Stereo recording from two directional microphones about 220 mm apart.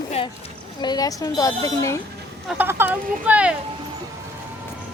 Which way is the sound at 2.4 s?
5° right (ahead or behind).